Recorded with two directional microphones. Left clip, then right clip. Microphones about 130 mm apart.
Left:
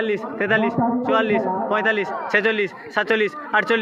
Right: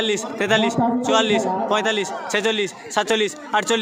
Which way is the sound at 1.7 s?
30° right (ahead or behind).